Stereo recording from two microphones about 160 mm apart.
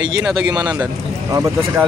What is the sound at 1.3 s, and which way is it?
Speech, 20° right (ahead or behind).